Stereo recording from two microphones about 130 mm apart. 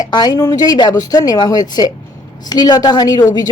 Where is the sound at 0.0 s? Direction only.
30° left (ahead or behind).